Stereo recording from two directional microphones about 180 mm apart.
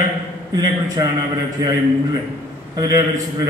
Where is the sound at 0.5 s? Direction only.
20° right (ahead or behind).